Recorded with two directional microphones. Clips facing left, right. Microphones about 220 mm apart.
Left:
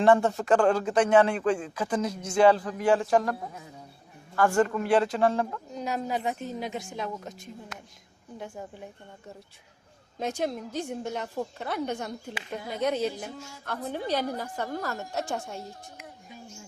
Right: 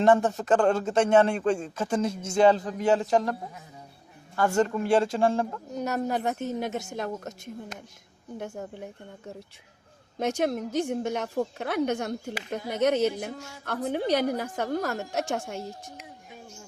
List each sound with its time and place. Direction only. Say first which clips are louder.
0.0 s speech: even; 20° right (ahead or behind)
1.4 s a woman's voice: right 1 dB; 45° right (ahead or behind)
1.7 s speech: right 2 dB; 25° right (ahead or behind)
4.4 s speech: even; 25° right (ahead or behind)
5.7 s a woman's voice: right 3 dB; 60° right (ahead or behind)
8.6 s speech: right 3 dB; 60° right (ahead or behind)
10.2 s speech: right 4 dB; 75° right (ahead or behind)